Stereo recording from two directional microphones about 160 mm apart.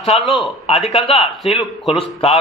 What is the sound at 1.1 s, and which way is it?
Speech, 35° left (ahead or behind).